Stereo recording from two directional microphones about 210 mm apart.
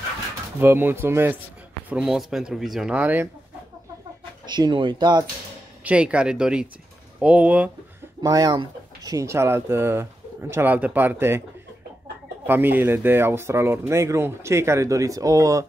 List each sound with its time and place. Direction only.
0.6 s speech: 10° right (ahead or behind)
4.5 s speech: 20° right (ahead or behind)
5.9 s speech: 5° right (ahead or behind)
8.2 s speech: 15° right (ahead or behind)
12.4 s speech: 10° right (ahead or behind)